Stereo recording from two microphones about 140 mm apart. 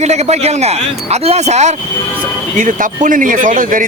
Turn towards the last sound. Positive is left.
turn(degrees=-70)  # may be behind; listen again after turning